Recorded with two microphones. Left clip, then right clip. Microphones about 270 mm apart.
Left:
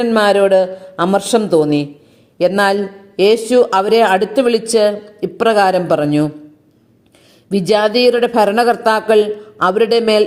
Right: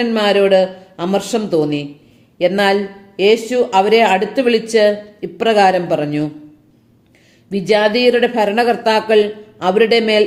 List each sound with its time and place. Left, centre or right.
0.0 s speech: left
7.5 s speech: left